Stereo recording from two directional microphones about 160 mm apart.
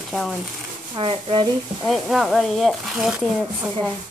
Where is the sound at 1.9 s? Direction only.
Centre (ahead or behind).